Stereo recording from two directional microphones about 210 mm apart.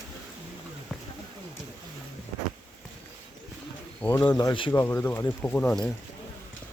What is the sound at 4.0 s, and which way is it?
Speech, 15° left (ahead or behind).